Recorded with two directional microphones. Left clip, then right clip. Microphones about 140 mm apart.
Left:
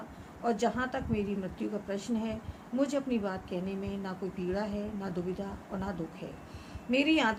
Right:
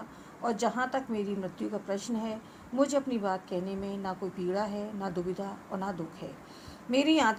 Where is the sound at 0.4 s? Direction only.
30° right (ahead or behind).